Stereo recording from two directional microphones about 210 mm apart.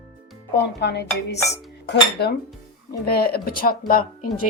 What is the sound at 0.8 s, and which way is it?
Speech, 55° left (ahead or behind).